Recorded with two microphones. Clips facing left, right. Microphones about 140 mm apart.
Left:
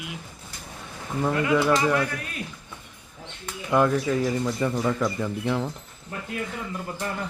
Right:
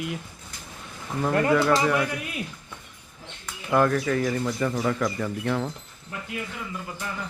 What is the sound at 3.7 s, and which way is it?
Speech, 20° left (ahead or behind).